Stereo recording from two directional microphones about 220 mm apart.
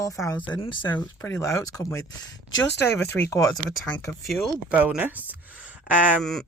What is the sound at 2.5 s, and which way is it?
Speech, 60° left (ahead or behind).